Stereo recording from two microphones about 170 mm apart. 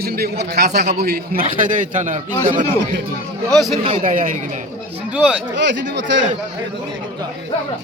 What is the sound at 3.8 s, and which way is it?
Speech, 50° right (ahead or behind).